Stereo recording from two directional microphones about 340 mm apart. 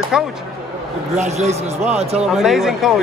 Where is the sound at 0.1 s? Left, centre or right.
Centre.